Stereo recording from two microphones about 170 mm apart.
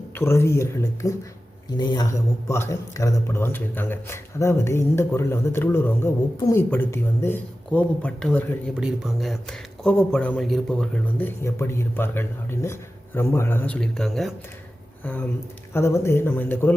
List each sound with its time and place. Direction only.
0.1 s speech: 15° left (ahead or behind)
8.7 s speech: 5° right (ahead or behind)
15.7 s speech: 15° left (ahead or behind)